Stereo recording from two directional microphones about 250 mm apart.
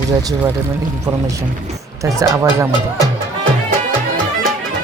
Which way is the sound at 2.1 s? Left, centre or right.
Centre.